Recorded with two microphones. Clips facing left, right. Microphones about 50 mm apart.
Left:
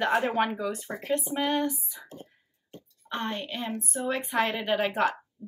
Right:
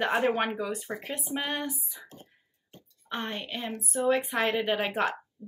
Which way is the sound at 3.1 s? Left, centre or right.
Centre.